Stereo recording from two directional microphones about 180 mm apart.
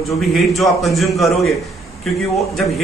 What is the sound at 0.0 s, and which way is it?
A man's voice, centre (ahead or behind).